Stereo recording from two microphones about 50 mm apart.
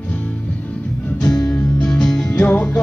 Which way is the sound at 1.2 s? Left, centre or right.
Centre.